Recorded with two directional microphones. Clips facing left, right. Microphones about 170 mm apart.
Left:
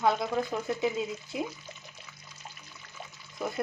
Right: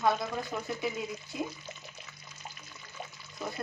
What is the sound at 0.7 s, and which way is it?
Speech, 20° left (ahead or behind).